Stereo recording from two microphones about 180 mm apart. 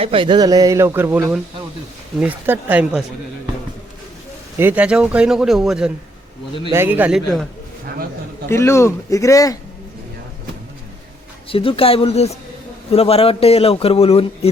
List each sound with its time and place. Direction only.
0.0 s a man's voice: 30° right (ahead or behind); by 3.0 s 10° right (ahead or behind)
4.6 s speech: 10° right (ahead or behind)
8.4 s speech: 15° left (ahead or behind)
11.4 s speech: 30° left (ahead or behind)